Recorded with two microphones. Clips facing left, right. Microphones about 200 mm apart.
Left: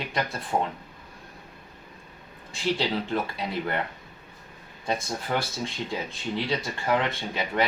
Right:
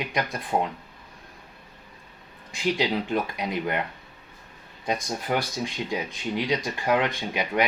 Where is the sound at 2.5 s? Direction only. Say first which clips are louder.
Right 2 dB; 15° right (ahead or behind).